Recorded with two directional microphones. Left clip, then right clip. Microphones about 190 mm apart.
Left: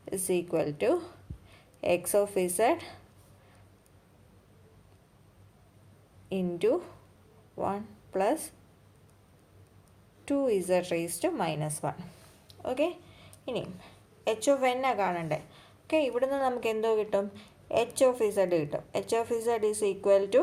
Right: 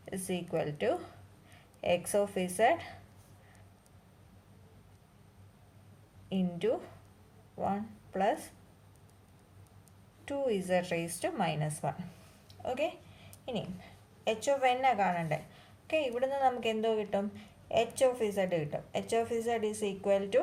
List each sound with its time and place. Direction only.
0.0 s a woman's voice: 35° left (ahead or behind)
6.2 s a woman's voice: 35° left (ahead or behind)
10.2 s a woman's voice: 30° left (ahead or behind)